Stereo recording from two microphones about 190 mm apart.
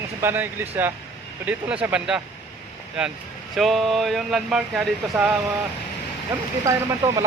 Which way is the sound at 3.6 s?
Centre (ahead or behind).